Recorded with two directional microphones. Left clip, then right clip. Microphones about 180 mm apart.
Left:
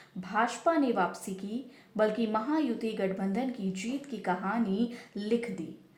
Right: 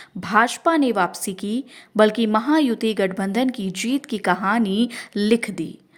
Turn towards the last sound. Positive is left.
turn(degrees=-40)  # may be behind; listen again after turning